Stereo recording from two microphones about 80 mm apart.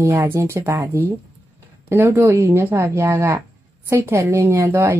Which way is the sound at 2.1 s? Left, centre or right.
Right.